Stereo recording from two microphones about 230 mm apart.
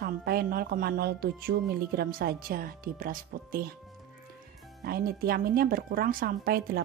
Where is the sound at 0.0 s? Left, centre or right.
Right.